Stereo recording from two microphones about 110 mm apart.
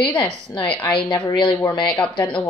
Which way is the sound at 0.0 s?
10° left (ahead or behind).